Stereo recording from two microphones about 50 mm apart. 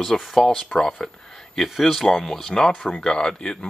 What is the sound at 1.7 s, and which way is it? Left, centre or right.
Speech, centre.